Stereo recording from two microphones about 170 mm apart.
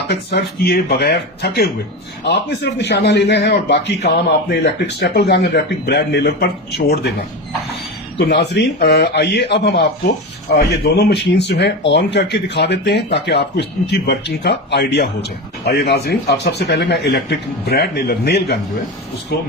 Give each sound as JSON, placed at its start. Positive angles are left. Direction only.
{"t": 0.1, "sound": "speech", "side_deg": 75}
{"t": 8.3, "sound": "speech", "side_deg": 85}